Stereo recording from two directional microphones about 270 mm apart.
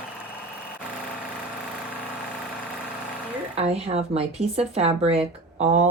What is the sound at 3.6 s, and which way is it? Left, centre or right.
Speech, right.